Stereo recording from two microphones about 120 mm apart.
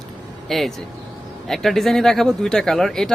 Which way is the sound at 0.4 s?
Centre (ahead or behind).